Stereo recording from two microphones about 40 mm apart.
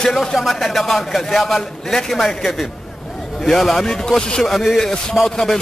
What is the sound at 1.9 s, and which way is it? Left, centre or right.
A man's voice, centre.